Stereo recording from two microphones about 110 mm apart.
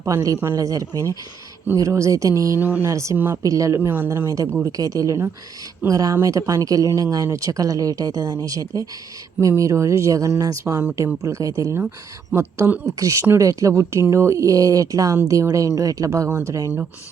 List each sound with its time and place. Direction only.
0.0 s speech: 30° right (ahead or behind)
2.6 s speech: 20° right (ahead or behind)
3.8 s speech: 20° right (ahead or behind)